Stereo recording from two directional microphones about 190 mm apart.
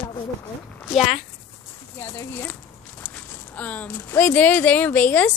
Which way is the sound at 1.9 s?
15° left (ahead or behind).